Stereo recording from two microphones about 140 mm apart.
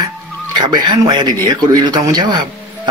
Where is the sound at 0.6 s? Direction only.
30° right (ahead or behind).